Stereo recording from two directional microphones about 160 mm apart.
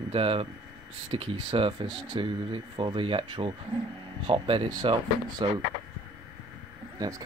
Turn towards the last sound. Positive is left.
turn(degrees=-25)  # may be behind; listen again after turning